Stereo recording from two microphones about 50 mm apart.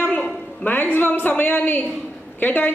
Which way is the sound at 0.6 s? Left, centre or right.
Left.